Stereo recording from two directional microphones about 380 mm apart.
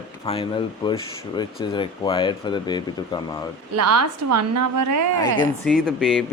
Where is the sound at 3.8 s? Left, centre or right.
Right.